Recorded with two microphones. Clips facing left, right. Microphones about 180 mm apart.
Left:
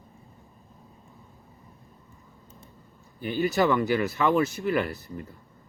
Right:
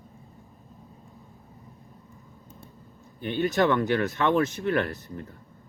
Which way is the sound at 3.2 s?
5° left (ahead or behind).